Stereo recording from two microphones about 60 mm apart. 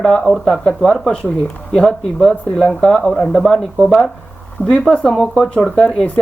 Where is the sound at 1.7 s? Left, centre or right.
Centre.